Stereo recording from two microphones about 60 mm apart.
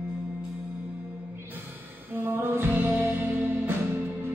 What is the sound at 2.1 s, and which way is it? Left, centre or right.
Music, right.